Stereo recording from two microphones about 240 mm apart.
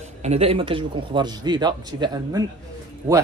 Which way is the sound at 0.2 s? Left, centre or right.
Right.